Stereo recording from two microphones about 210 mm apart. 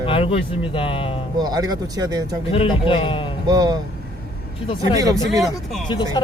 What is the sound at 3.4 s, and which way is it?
Speech, 20° right (ahead or behind).